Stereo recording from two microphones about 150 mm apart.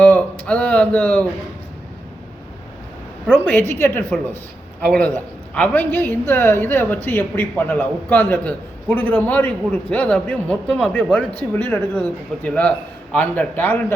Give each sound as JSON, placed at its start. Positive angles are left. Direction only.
{"t": 0.0, "sound": "speech", "side_deg": 10}
{"t": 3.4, "sound": "a man's voice", "side_deg": 15}